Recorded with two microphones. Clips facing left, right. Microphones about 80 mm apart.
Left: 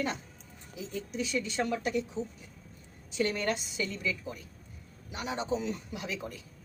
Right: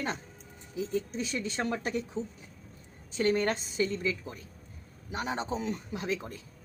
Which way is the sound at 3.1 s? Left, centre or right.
Right.